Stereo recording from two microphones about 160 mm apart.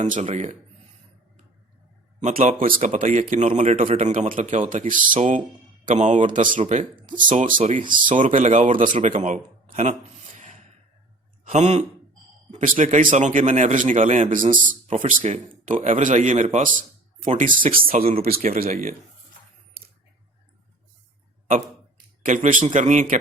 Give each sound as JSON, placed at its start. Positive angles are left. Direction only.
{"t": 0.0, "sound": "speech", "side_deg": -45}
{"t": 2.6, "sound": "speech", "side_deg": -60}
{"t": 4.1, "sound": "speech", "side_deg": -55}
{"t": 10.4, "sound": "a sound", "side_deg": -45}
{"t": 11.4, "sound": "speech", "side_deg": -45}
{"t": 17.7, "sound": "speech", "side_deg": -60}
{"t": 22.2, "sound": "speech", "side_deg": -55}